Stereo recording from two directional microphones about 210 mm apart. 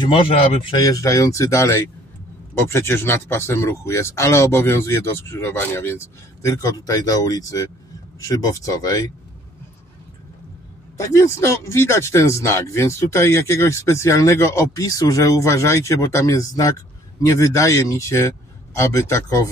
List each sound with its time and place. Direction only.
0.0 s speech: 25° left (ahead or behind)
11.0 s speech: 15° left (ahead or behind)